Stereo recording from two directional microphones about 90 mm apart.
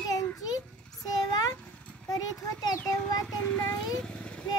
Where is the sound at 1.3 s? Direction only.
45° left (ahead or behind).